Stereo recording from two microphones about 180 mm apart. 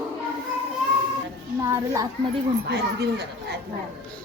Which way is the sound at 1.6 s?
15° right (ahead or behind).